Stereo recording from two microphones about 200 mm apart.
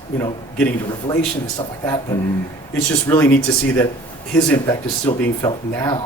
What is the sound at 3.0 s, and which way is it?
Speech, 15° left (ahead or behind).